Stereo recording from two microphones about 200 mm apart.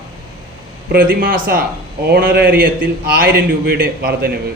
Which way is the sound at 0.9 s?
45° right (ahead or behind).